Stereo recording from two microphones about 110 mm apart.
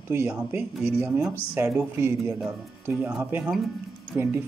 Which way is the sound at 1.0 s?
10° right (ahead or behind).